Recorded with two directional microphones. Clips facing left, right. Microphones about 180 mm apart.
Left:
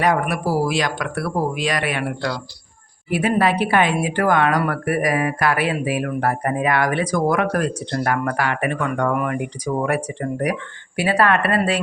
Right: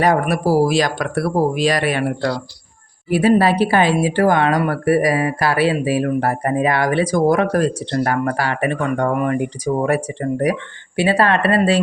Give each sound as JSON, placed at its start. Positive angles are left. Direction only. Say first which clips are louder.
{"t": 0.0, "sound": "speech", "louder": "right 3 dB", "side_deg": -35}